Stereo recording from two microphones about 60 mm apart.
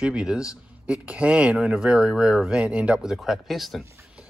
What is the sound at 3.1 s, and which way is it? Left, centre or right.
Speech, centre.